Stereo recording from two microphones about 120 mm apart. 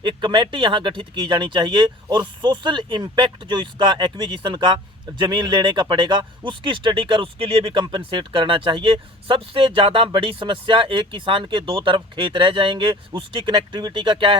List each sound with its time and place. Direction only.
0.0 s speech: 40° right (ahead or behind)